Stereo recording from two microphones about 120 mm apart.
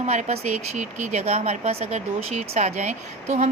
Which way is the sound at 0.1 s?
65° right (ahead or behind).